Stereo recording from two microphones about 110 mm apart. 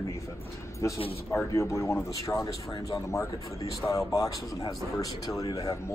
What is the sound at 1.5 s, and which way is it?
Speech, 25° left (ahead or behind).